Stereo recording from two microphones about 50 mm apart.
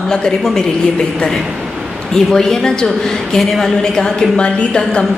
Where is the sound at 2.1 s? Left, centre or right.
Centre.